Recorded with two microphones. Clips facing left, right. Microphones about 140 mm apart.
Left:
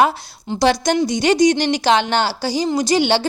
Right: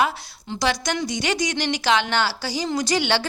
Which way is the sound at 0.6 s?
30° left (ahead or behind).